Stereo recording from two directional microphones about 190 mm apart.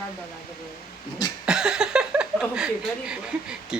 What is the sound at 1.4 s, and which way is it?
Speech, 5° right (ahead or behind).